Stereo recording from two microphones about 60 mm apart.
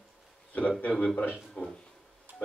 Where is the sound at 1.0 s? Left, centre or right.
Left.